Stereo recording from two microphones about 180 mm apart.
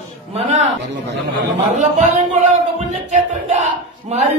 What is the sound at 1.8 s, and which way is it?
A man's voice, 40° right (ahead or behind).